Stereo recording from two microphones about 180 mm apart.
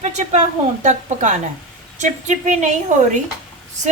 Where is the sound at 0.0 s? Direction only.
40° right (ahead or behind).